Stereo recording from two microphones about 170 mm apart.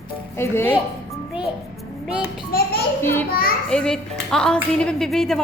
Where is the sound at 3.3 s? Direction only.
60° left (ahead or behind).